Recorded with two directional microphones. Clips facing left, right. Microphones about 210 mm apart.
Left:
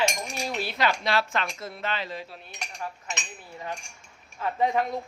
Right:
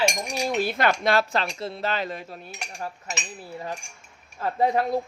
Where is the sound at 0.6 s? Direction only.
50° right (ahead or behind).